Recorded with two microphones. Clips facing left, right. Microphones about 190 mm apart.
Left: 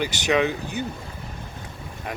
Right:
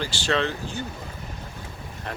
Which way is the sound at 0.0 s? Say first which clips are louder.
Left 3 dB; 15° left (ahead or behind).